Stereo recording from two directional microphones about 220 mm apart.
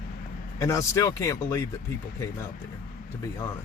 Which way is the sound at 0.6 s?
15° left (ahead or behind).